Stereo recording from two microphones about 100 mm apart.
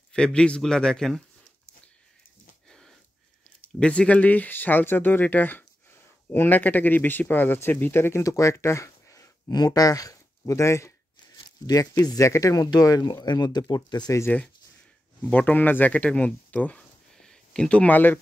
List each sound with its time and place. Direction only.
0.1 s a man's voice: 10° left (ahead or behind)
3.8 s speech: 10° left (ahead or behind); by 14.1 s 45° left (ahead or behind)
15.2 s speech: 15° left (ahead or behind)